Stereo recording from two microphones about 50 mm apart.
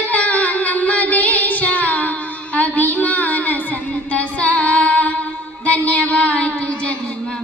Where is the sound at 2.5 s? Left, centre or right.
Left.